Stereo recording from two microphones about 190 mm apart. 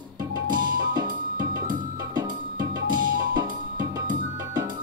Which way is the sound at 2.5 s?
45° right (ahead or behind).